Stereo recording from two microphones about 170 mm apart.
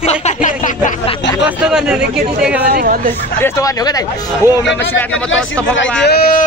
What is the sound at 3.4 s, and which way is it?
Speech, 20° left (ahead or behind).